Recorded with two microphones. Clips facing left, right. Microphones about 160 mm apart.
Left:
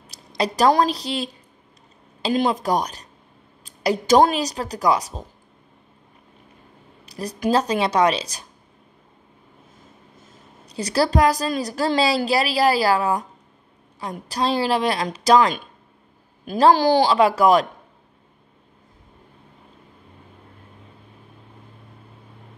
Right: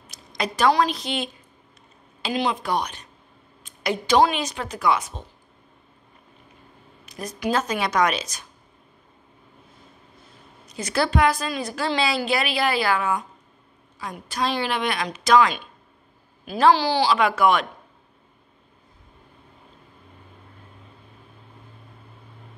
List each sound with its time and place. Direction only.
0.0 s a woman's voice: 35° left (ahead or behind)
7.1 s a woman's voice: 35° left (ahead or behind)
10.2 s a woman's voice: 35° left (ahead or behind)
17.1 s a woman's voice: 35° left (ahead or behind)